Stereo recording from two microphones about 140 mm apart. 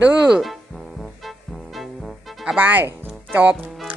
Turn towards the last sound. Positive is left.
turn(degrees=0)  # may be behind; listen again after turning